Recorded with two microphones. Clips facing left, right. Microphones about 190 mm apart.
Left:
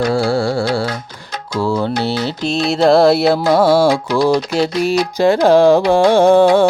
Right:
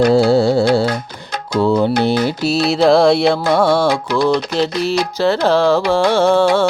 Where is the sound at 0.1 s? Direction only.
20° right (ahead or behind).